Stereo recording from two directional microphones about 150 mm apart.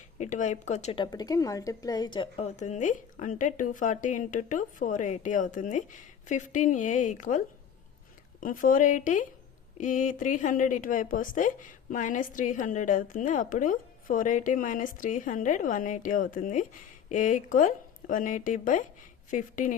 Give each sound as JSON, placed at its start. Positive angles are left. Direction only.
{"t": 0.2, "sound": "speech", "side_deg": 55}
{"t": 0.9, "sound": "a woman's voice", "side_deg": 30}